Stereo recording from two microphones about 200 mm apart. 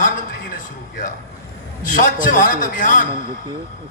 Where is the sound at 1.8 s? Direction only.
40° left (ahead or behind).